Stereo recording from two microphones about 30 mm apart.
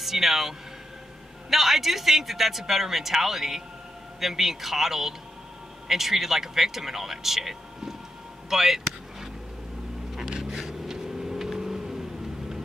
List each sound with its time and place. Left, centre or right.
0.0 s a man's voice: centre
10.5 s vehicle: centre
10.9 s vehicle: centre